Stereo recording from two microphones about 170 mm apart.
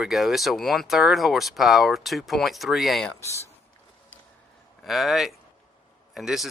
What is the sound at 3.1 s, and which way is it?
Speech, 15° left (ahead or behind).